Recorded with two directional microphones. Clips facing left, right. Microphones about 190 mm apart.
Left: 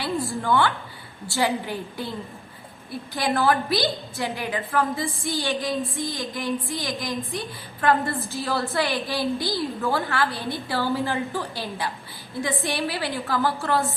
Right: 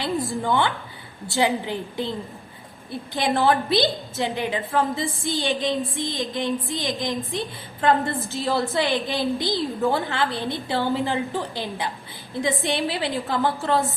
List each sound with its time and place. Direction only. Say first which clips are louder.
0.4 s a woman's voice: left 3 dB; 15° right (ahead or behind)
3.2 s a woman's voice: right 1 dB; 25° right (ahead or behind)